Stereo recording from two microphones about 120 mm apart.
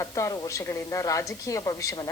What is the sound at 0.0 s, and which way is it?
Speech, 25° left (ahead or behind).